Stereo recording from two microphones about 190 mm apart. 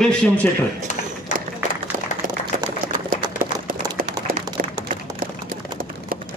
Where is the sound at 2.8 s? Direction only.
45° right (ahead or behind).